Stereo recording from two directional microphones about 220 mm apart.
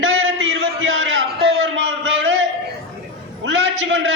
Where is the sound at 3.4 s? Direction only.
60° right (ahead or behind).